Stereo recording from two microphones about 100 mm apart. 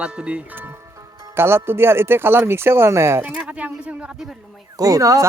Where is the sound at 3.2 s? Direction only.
15° right (ahead or behind).